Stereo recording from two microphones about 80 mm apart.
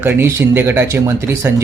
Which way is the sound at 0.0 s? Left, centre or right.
Right.